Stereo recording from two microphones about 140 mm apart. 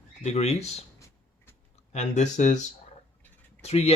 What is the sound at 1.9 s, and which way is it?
Speech, 55° left (ahead or behind).